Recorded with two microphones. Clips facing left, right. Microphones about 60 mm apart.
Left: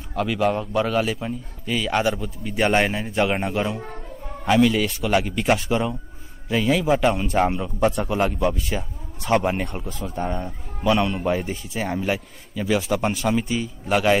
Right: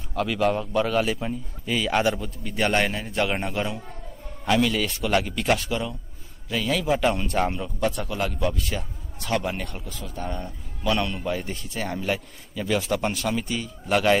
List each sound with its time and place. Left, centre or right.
0.1 s a man's voice: centre
8.1 s a man's voice: left
8.6 s a sound: centre
9.3 s a man's voice: left
9.8 s speech: left
10.3 s speech: centre